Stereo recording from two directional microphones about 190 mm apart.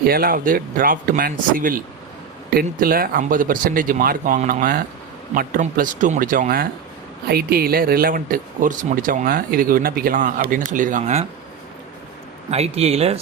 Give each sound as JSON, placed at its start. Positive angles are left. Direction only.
{"t": 0.0, "sound": "speech", "side_deg": -50}
{"t": 12.5, "sound": "speech", "side_deg": -35}